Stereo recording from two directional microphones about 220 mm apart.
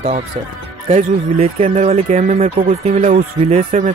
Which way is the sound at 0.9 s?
25° right (ahead or behind).